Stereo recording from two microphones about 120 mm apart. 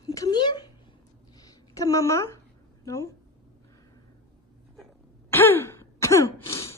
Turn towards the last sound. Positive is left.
turn(degrees=25)  # may be behind; listen again after turning